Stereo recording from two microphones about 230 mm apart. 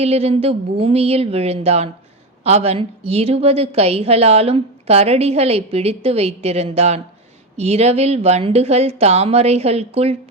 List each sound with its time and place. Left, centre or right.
0.0 s a woman's voice: right